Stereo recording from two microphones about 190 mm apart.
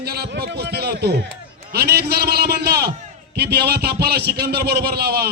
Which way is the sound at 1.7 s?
55° right (ahead or behind).